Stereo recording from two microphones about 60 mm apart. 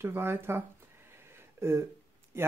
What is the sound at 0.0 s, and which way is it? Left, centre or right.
Speech, right.